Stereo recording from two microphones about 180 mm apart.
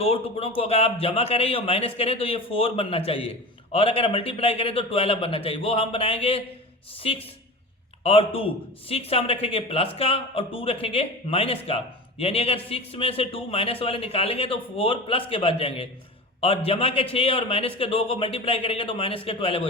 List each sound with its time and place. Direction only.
0.0 s speech: 30° left (ahead or behind)